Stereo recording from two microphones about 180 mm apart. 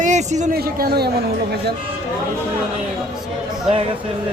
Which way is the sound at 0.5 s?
55° right (ahead or behind).